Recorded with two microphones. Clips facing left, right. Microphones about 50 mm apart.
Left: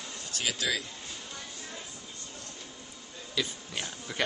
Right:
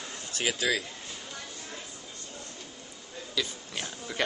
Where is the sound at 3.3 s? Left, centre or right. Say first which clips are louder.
Even; centre.